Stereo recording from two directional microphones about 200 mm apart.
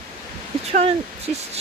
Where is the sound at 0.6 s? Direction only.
30° right (ahead or behind).